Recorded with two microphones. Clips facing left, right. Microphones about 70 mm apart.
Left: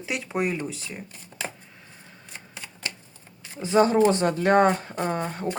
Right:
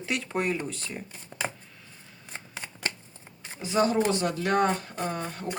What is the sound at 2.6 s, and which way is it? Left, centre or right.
Shuffling cards, right.